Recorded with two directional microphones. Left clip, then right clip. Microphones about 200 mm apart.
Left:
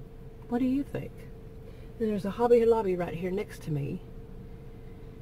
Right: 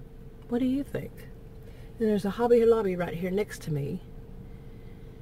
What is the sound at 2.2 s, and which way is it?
Speech, 25° right (ahead or behind).